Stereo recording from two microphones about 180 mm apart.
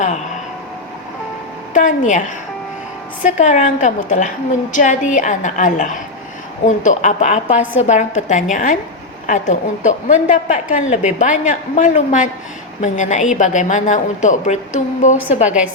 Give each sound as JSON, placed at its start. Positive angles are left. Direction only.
{"t": 1.7, "sound": "a woman's voice", "side_deg": 45}
{"t": 3.2, "sound": "a woman's voice", "side_deg": 40}
{"t": 15.4, "sound": "a woman's voice", "side_deg": -5}